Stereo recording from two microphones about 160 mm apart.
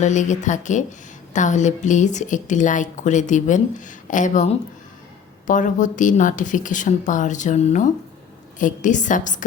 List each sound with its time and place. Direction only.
0.0 s a woman's voice: 50° left (ahead or behind)